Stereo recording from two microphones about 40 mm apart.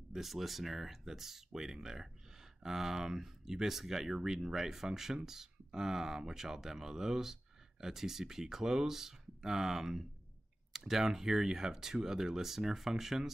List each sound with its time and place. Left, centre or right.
0.1 s speech: centre